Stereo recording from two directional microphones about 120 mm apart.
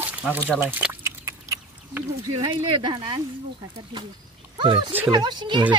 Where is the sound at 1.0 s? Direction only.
25° right (ahead or behind).